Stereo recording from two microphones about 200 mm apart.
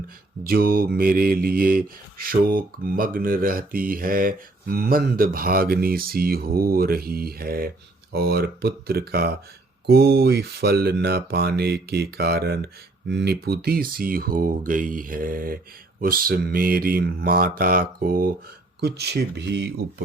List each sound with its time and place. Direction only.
0.4 s speech: 50° right (ahead or behind)